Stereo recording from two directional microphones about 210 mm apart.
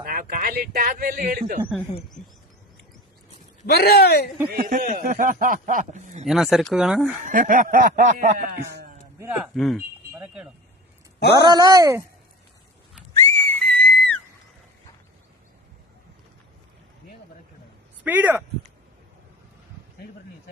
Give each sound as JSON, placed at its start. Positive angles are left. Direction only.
{"t": 0.0, "sound": "a man's voice", "side_deg": -45}
{"t": 2.2, "sound": "bird", "side_deg": 35}
{"t": 3.7, "sound": "speech", "side_deg": 50}
{"t": 4.4, "sound": "speech", "side_deg": -45}
{"t": 6.2, "sound": "speech", "side_deg": 0}
{"t": 7.3, "sound": "speech", "side_deg": -40}
{"t": 9.6, "sound": "speech", "side_deg": 0}
{"t": 11.3, "sound": "speech", "side_deg": -20}
{"t": 13.2, "sound": "whistle", "side_deg": 10}
{"t": 18.0, "sound": "speech", "side_deg": -10}